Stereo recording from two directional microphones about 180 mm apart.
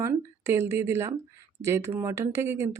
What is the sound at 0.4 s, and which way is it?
A woman's voice, 15° right (ahead or behind).